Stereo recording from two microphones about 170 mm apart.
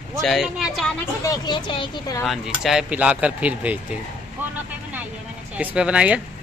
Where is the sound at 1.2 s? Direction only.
25° left (ahead or behind).